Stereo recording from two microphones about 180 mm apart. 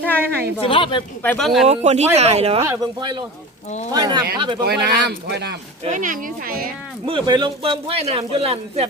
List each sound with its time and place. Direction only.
0.6 s a woman's voice: 30° left (ahead or behind)
1.2 s speech: 5° left (ahead or behind)
1.6 s speech: 40° right (ahead or behind)
4.6 s speech: 65° right (ahead or behind)
5.8 s speech: 45° right (ahead or behind)
7.1 s speech: 25° right (ahead or behind)